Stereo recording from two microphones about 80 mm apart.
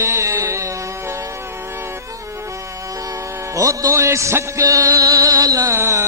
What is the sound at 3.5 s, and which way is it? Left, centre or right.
Music, right.